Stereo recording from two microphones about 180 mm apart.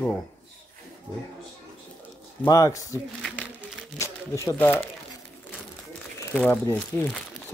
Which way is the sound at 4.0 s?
15° left (ahead or behind).